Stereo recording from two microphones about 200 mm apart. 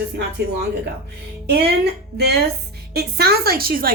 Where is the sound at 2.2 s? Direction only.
55° right (ahead or behind).